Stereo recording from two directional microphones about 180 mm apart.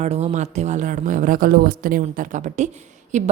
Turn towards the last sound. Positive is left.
turn(degrees=-40)  # may be behind; listen again after turning